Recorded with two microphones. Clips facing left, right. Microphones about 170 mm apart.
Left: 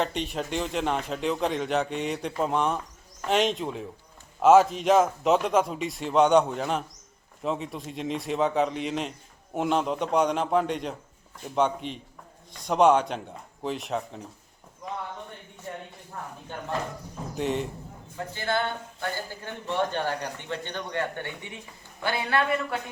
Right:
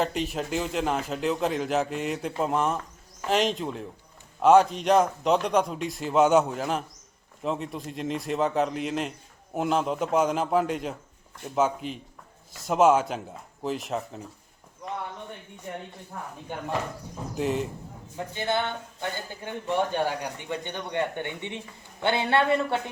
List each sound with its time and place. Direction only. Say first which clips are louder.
0.0 s speech: right 1 dB; centre (ahead or behind)
17.3 s speech: right 1 dB; centre (ahead or behind)
18.3 s a man's voice: even; 20° right (ahead or behind)